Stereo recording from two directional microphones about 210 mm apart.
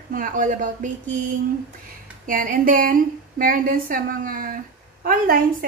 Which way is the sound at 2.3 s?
40° right (ahead or behind).